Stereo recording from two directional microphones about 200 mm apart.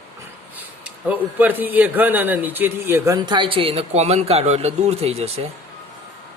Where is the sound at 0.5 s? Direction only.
10° right (ahead or behind).